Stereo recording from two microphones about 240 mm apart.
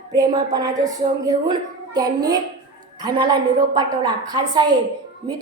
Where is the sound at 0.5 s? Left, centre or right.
Centre.